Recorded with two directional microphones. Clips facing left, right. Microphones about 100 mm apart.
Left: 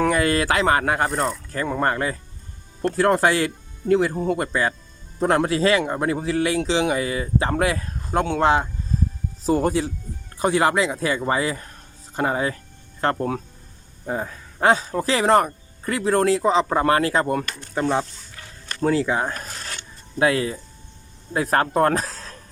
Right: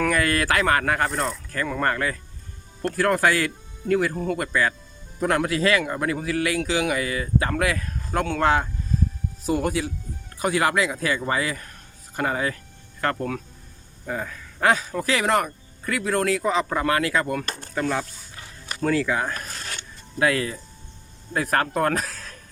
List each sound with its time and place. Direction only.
0.0 s a man's voice: 20° left (ahead or behind)
18.3 s dog: 10° right (ahead or behind)
18.8 s speech: 25° left (ahead or behind)